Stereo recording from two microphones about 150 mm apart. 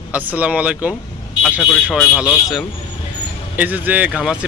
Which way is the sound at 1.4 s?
Centre (ahead or behind).